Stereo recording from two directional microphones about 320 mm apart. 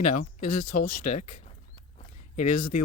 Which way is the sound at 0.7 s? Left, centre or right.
Left.